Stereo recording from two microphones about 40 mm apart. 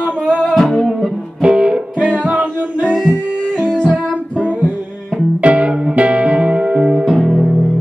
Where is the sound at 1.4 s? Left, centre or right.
Right.